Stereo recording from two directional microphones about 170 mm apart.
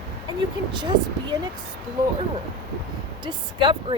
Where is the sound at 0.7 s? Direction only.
25° right (ahead or behind).